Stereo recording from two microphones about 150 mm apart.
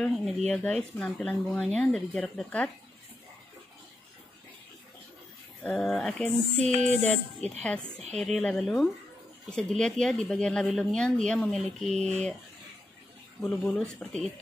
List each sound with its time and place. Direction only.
0.0 s speech: centre (ahead or behind)
5.6 s speech: 5° left (ahead or behind)
6.8 s music: 50° right (ahead or behind)
8.2 s speech: 5° left (ahead or behind)
13.4 s speech: 5° left (ahead or behind)